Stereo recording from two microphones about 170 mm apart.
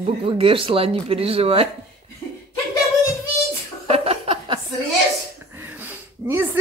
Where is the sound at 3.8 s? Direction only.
35° right (ahead or behind).